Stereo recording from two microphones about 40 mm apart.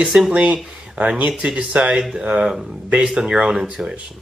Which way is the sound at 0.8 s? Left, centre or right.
Right.